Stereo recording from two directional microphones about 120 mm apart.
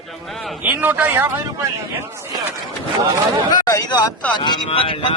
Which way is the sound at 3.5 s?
35° left (ahead or behind).